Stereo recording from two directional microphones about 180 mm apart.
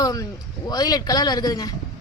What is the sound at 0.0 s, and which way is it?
Speech, 20° left (ahead or behind).